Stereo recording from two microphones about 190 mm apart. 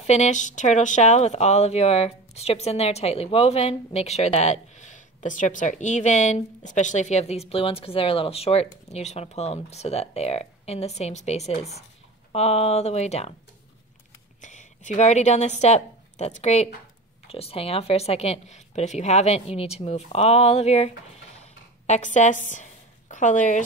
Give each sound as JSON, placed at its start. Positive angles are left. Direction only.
{"t": 0.0, "sound": "speech", "side_deg": 35}
{"t": 14.4, "sound": "a woman's voice", "side_deg": 40}
{"t": 21.4, "sound": "a sound", "side_deg": 40}